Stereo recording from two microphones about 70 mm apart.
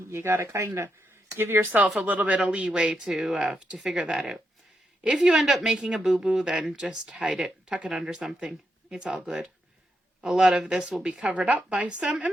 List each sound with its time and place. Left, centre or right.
0.1 s speech: right
2.0 s speech: right
2.4 s a woman's voice: centre
5.4 s a woman's voice: centre
11.2 s speech: centre